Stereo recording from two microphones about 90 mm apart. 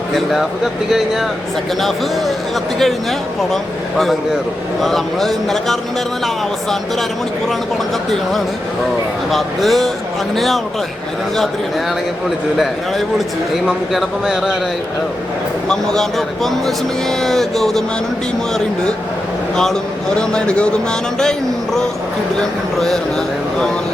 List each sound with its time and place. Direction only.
0.1 s speech: 5° right (ahead or behind)
2.7 s speech: centre (ahead or behind)
8.1 s speech: centre (ahead or behind)
12.5 s speech: centre (ahead or behind)
15.7 s speech: 5° left (ahead or behind)
20.1 s a man's voice: 10° left (ahead or behind)